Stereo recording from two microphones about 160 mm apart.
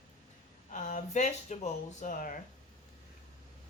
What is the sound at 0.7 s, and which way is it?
Speech, 50° left (ahead or behind).